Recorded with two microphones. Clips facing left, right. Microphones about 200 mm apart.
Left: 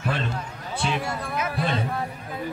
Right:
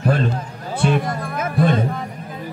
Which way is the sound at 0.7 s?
50° right (ahead or behind).